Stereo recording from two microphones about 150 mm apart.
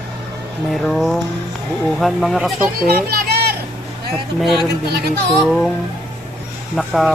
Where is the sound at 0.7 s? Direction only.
Centre (ahead or behind).